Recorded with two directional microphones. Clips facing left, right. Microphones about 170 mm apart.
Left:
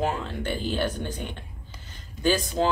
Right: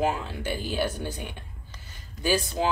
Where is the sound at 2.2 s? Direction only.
10° right (ahead or behind).